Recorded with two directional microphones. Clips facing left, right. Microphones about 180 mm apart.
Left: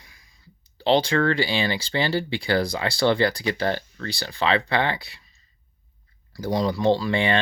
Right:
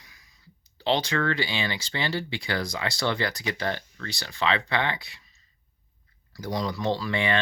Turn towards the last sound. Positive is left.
turn(degrees=30)  # may be behind; listen again after turning